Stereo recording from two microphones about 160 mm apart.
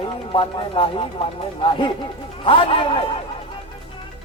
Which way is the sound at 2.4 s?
35° left (ahead or behind).